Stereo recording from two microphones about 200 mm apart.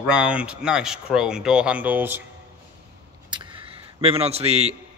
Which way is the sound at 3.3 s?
25° right (ahead or behind).